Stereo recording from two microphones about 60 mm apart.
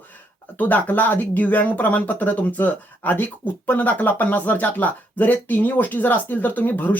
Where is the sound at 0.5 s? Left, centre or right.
Left.